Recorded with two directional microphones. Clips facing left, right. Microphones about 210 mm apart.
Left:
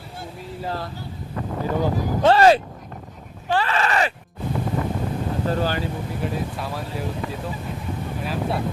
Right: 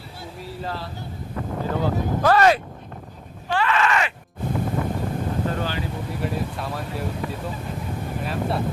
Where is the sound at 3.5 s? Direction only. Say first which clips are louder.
Even; 35° left (ahead or behind).